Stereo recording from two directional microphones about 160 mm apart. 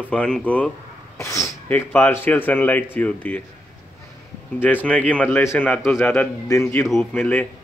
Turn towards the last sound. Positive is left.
turn(degrees=10)  # may be behind; listen again after turning